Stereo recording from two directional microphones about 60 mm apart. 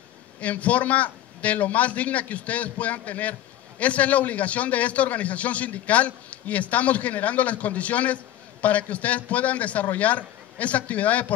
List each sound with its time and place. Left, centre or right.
0.4 s a man's voice: left